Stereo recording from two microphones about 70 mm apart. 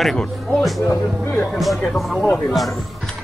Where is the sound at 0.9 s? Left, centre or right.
Left.